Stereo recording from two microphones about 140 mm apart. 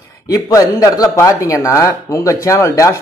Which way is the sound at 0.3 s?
25° left (ahead or behind).